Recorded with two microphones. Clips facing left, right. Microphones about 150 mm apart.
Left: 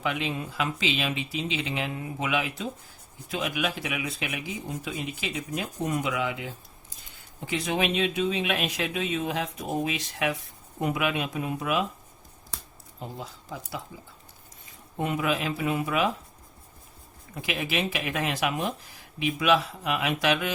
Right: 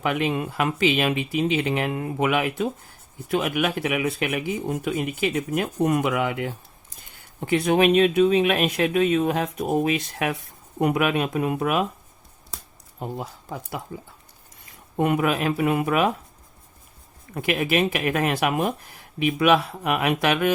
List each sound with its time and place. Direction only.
0.0 s speech: 55° right (ahead or behind)
13.0 s speech: 55° right (ahead or behind)
14.9 s speech: 60° right (ahead or behind)
17.3 s speech: 55° right (ahead or behind)